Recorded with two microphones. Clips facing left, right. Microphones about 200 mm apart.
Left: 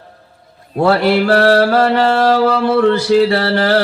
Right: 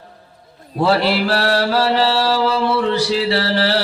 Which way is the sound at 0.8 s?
55° left (ahead or behind).